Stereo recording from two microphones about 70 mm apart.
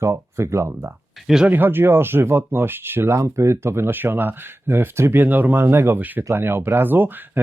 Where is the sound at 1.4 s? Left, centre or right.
Right.